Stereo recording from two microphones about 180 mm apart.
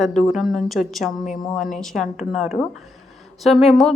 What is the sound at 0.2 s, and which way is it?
A woman's voice, centre (ahead or behind).